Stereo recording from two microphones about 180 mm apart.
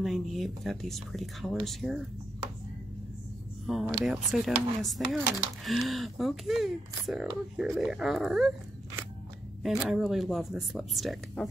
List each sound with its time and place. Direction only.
0.0 s speech: centre (ahead or behind)
3.6 s speech: centre (ahead or behind)
9.6 s speech: centre (ahead or behind)